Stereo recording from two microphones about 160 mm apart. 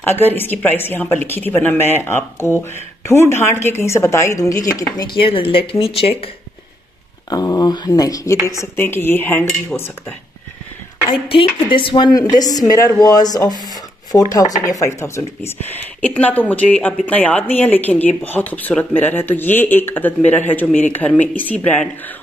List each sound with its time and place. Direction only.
0.0 s speech: 15° left (ahead or behind); by 6.3 s 35° left (ahead or behind)
7.2 s speech: 25° left (ahead or behind)
11.1 s speech: 35° left (ahead or behind); by 21.8 s 10° left (ahead or behind)